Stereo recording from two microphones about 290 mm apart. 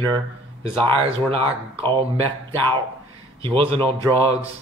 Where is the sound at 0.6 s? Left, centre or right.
Centre.